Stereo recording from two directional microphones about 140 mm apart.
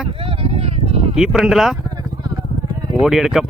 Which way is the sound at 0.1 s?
40° right (ahead or behind).